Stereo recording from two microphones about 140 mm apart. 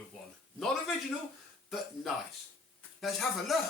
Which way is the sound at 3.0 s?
Centre (ahead or behind).